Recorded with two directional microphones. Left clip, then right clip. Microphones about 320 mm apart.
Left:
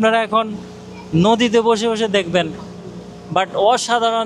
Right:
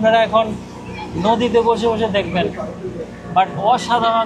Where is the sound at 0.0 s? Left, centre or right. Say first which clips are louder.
Right 2 dB; left.